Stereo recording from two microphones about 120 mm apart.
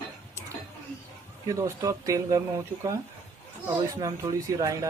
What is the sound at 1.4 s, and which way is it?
Speech, 30° right (ahead or behind).